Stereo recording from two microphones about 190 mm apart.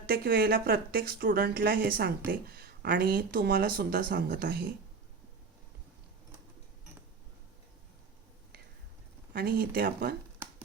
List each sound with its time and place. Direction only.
0.1 s speech: 55° right (ahead or behind)
9.3 s speech: 55° right (ahead or behind)